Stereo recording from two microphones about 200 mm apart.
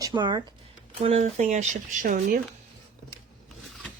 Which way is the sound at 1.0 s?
35° right (ahead or behind).